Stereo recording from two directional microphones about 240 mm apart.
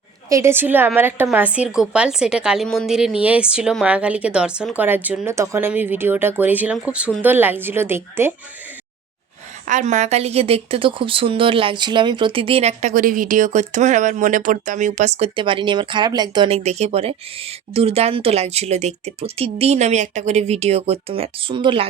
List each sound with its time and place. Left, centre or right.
0.3 s a woman's voice: centre
9.6 s a woman's voice: right